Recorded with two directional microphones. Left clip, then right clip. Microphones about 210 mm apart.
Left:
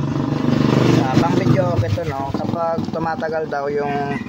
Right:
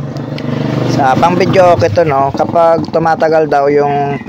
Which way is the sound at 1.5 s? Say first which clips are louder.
Right 14 dB; 40° right (ahead or behind).